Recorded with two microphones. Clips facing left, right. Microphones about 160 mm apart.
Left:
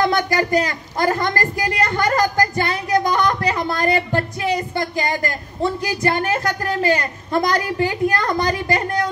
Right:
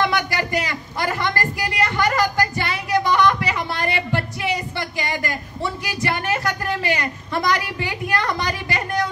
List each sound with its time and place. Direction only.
0.0 s a man's voice: 45° left (ahead or behind)